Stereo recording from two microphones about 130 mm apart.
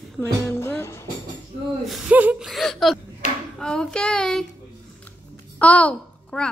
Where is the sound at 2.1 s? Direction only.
10° right (ahead or behind).